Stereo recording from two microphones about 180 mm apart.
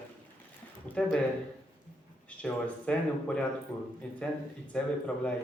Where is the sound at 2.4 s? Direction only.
5° left (ahead or behind).